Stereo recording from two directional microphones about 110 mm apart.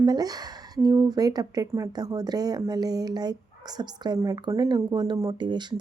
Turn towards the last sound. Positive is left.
turn(degrees=-40)  # may be behind; listen again after turning